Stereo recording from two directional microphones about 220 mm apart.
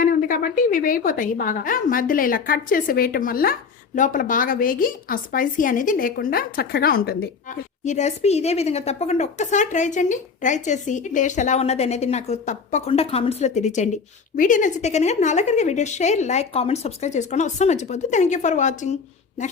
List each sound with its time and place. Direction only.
0.0 s speech: 40° left (ahead or behind)